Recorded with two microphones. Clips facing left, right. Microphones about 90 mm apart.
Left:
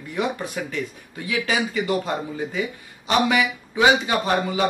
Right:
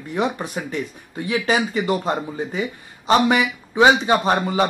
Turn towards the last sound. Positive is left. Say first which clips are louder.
# right 2 dB
turn(degrees=-30)  # may be behind; listen again after turning